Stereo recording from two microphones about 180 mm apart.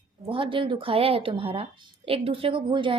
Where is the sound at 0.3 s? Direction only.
30° right (ahead or behind).